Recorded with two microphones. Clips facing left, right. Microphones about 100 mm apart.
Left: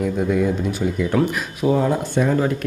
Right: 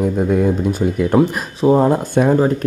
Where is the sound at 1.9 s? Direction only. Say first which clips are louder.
Right 5 dB; 45° right (ahead or behind).